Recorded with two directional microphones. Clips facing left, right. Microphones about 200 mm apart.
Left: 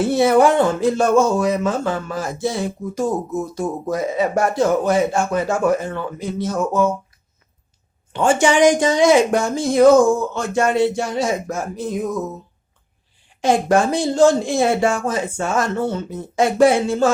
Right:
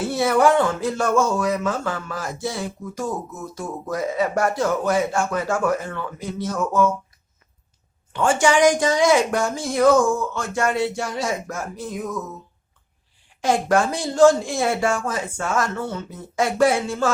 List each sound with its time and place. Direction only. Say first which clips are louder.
0.1 s speech: left 2 dB; 25° left (ahead or behind)
8.1 s speech: left 2 dB; 20° left (ahead or behind)
13.4 s speech: left 3 dB; 20° left (ahead or behind)